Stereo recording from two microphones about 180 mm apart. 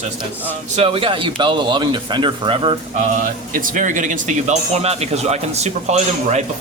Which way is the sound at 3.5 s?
45° right (ahead or behind).